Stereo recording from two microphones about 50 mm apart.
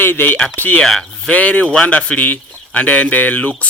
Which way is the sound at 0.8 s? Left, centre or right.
Centre.